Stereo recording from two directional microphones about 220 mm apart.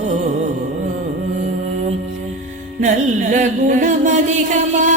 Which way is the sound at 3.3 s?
35° right (ahead or behind).